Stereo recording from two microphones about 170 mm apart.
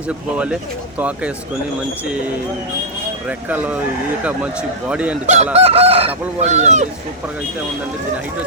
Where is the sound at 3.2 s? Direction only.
10° right (ahead or behind).